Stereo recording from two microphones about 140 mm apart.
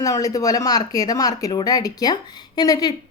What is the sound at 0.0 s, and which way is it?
Speech, 25° left (ahead or behind).